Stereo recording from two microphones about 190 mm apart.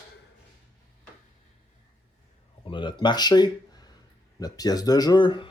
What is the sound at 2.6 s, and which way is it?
Speech, 25° left (ahead or behind).